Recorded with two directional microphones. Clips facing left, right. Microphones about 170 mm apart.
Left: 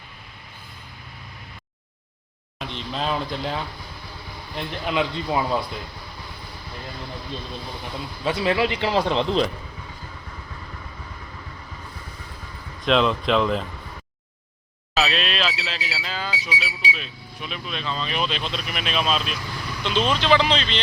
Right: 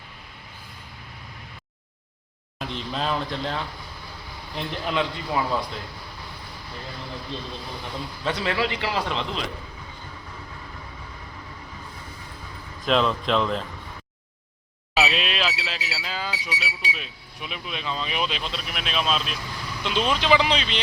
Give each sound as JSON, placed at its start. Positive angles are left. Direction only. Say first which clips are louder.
{"t": 2.6, "sound": "speech", "louder": "even", "side_deg": 0}
{"t": 4.9, "sound": "a man's voice", "louder": "left 3 dB", "side_deg": 15}
{"t": 8.2, "sound": "a man's voice", "louder": "left 4 dB", "side_deg": 15}
{"t": 12.8, "sound": "speech", "louder": "left 2 dB", "side_deg": 0}
{"t": 14.9, "sound": "speech", "louder": "left 1 dB", "side_deg": -10}